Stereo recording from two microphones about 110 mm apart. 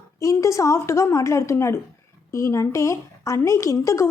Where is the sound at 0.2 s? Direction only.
30° left (ahead or behind).